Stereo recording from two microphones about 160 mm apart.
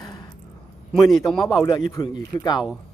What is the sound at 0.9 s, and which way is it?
Speech, centre (ahead or behind).